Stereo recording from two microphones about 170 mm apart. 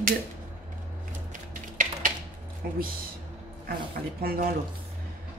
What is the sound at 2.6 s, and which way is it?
Speech, 60° right (ahead or behind).